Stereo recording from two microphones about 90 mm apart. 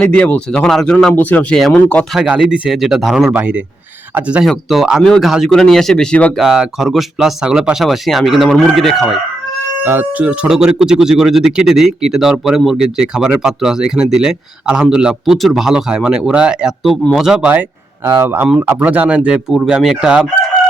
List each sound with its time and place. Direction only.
0.0 s speech: 15° left (ahead or behind)
1.1 s speech: 20° left (ahead or behind)
2.1 s speech: 5° right (ahead or behind)
3.2 s a man's voice: 15° right (ahead or behind)
4.4 s speech: centre (ahead or behind)
6.3 s speech: 5° right (ahead or behind)
9.8 s a man's voice: 25° right (ahead or behind); by 17.5 s 5° right (ahead or behind)
18.0 s a man's voice: 30° right (ahead or behind); by 20.2 s 10° right (ahead or behind)